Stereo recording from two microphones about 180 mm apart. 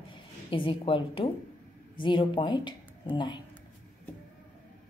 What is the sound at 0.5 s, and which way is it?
Speech, 30° left (ahead or behind).